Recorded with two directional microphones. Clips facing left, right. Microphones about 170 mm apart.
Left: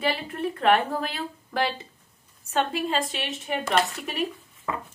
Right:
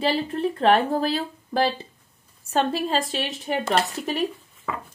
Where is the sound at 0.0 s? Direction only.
30° right (ahead or behind).